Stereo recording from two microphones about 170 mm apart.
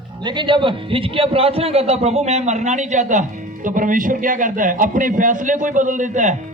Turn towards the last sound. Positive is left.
turn(degrees=-45)  # may be behind; listen again after turning